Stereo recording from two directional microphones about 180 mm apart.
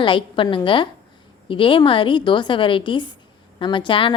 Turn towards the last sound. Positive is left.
turn(degrees=30)  # may be behind; listen again after turning